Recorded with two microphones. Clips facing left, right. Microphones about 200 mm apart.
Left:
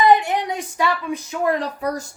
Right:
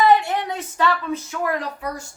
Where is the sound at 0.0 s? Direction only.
15° left (ahead or behind).